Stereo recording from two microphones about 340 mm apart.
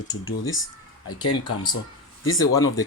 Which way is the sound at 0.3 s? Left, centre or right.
Left.